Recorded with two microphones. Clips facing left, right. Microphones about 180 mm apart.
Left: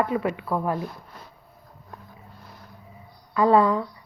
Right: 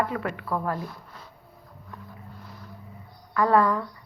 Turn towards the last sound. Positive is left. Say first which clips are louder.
# left 3 dB
turn(degrees=20)  # may be behind; listen again after turning